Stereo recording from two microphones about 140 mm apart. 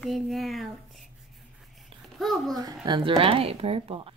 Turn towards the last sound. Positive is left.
turn(degrees=-40)  # may be behind; listen again after turning